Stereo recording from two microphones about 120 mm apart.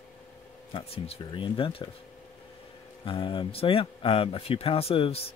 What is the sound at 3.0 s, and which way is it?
Speech, 45° left (ahead or behind).